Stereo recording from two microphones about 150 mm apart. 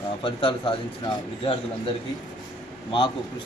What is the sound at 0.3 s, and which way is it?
Speech, 35° left (ahead or behind).